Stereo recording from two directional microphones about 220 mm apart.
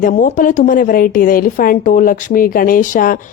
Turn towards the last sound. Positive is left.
turn(degrees=35)  # may be behind; listen again after turning